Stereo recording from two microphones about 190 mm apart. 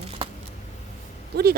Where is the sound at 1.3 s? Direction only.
55° right (ahead or behind).